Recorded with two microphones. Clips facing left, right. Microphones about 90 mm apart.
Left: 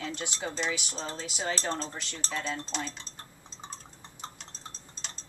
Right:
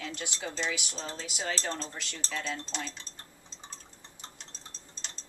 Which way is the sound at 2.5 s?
10° left (ahead or behind).